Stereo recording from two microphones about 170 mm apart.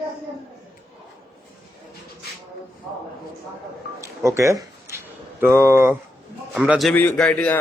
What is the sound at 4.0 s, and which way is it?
A man's voice, 15° right (ahead or behind).